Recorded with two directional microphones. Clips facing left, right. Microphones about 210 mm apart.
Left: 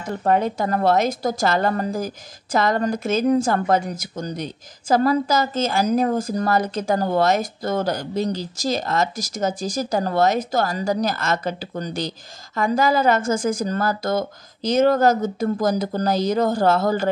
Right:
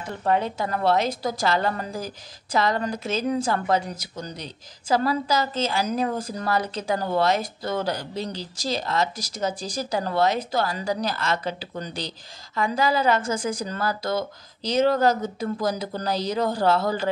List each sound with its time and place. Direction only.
0.0 s a woman's voice: 45° left (ahead or behind)